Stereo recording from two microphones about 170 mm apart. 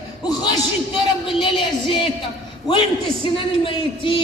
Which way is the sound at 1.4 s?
30° left (ahead or behind).